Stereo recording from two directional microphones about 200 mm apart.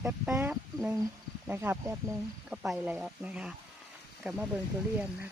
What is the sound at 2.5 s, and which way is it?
Speech, 5° right (ahead or behind).